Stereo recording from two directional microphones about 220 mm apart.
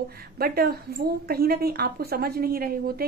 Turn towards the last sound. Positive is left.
turn(degrees=-45)  # may be behind; listen again after turning